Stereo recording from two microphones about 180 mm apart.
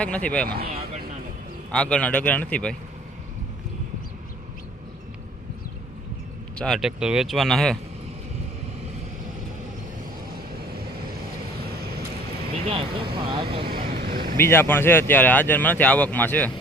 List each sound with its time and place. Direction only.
0.0 s speech: 5° left (ahead or behind)
1.7 s speech: 5° left (ahead or behind)
6.6 s speech: centre (ahead or behind)
12.6 s speech: 30° right (ahead or behind)
13.7 s vehicle: 55° right (ahead or behind)
14.3 s speech: 15° left (ahead or behind)